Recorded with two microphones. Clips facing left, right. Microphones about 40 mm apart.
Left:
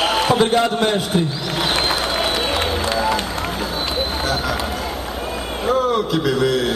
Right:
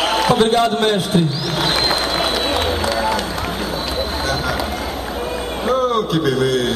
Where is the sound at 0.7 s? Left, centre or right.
Right.